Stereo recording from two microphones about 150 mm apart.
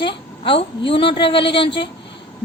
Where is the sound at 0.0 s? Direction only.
35° left (ahead or behind).